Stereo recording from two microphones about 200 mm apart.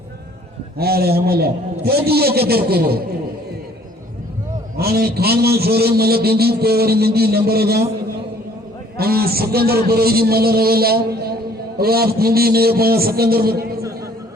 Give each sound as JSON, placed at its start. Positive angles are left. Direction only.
{"t": 0.8, "sound": "a man's voice", "side_deg": -50}
{"t": 4.8, "sound": "a man's voice", "side_deg": -50}
{"t": 9.0, "sound": "a man's voice", "side_deg": -50}